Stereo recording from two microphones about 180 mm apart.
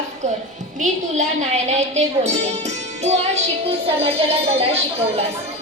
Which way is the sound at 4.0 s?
35° right (ahead or behind).